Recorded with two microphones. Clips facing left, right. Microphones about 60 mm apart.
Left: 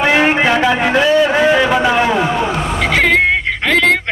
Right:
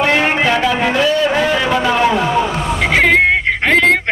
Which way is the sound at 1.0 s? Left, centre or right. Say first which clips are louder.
Left 5 dB; centre.